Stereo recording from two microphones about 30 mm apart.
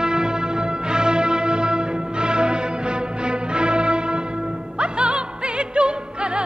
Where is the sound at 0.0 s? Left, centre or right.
Right.